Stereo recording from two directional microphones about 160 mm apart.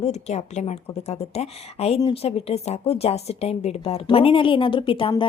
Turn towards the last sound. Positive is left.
turn(degrees=35)  # may be behind; listen again after turning